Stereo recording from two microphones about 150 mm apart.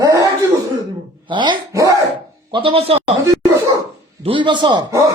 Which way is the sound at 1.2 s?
35° right (ahead or behind).